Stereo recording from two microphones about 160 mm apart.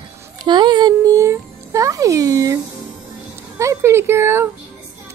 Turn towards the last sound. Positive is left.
turn(degrees=-15)  # may be behind; listen again after turning